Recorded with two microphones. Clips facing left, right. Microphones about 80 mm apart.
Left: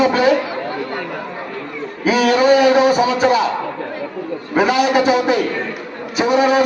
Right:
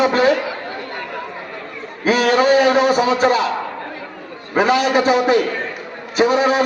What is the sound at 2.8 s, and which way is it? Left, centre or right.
Speech, right.